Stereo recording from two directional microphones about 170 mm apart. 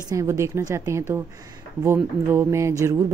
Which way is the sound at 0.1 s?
20° right (ahead or behind).